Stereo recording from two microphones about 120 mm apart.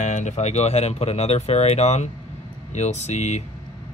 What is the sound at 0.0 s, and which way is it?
Speech, 80° left.